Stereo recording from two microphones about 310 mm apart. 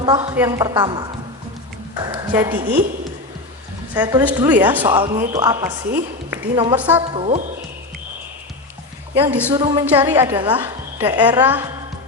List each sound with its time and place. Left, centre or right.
0.0 s a man's voice: centre
2.0 s a sound: centre
3.9 s a woman's voice: centre
4.9 s a man's voice: centre
6.7 s a woman's voice: centre
7.1 s speech: centre
9.1 s a man's voice: centre